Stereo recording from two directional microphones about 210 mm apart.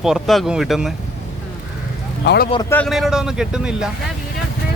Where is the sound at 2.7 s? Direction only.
5° left (ahead or behind).